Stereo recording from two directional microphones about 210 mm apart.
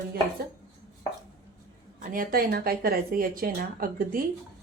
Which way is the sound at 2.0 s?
45° right (ahead or behind).